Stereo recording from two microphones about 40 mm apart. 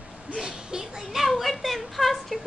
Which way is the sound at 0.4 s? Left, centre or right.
Centre.